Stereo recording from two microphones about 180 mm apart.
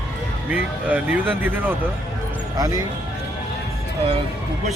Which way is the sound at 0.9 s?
10° right (ahead or behind).